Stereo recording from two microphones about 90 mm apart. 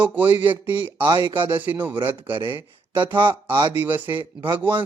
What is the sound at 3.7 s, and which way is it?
Speech, 20° right (ahead or behind).